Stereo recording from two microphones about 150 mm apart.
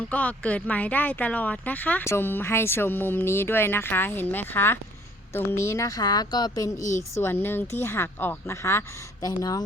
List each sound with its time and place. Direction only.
0.1 s a woman's voice: 10° left (ahead or behind); by 9.6 s 25° left (ahead or behind)